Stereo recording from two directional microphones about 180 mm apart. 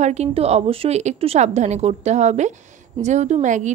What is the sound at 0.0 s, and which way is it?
A woman's voice, 40° right (ahead or behind).